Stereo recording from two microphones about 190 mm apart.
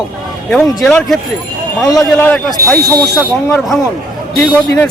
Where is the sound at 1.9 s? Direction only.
15° left (ahead or behind).